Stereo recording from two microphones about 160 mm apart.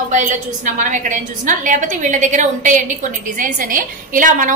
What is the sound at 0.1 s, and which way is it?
A woman's voice, 50° right (ahead or behind).